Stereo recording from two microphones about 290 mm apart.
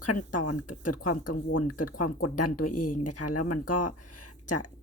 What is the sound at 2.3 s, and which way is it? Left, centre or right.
Speech, left.